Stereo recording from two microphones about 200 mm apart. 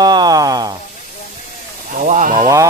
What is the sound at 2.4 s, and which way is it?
Speech, 15° right (ahead or behind).